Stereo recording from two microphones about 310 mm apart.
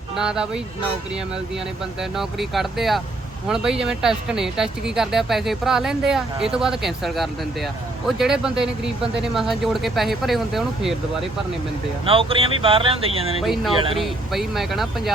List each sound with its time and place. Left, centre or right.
0.2 s speech: centre
2.0 s speech: centre
12.0 s speech: centre
13.4 s speech: centre